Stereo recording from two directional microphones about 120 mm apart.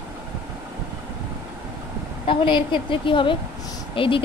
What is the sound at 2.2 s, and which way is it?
Speech, 45° left (ahead or behind).